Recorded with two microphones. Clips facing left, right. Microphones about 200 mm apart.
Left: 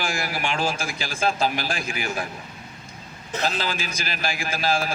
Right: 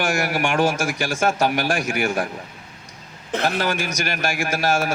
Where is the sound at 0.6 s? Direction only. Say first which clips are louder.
Right 6 dB; 90° right.